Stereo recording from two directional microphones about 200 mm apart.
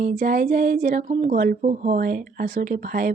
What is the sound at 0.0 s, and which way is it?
Speech, 40° right (ahead or behind).